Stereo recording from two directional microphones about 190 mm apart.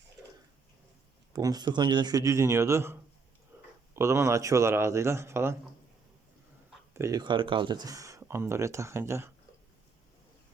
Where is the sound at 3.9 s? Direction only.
15° right (ahead or behind).